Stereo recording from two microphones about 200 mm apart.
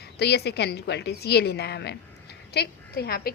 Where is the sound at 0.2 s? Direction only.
55° left (ahead or behind).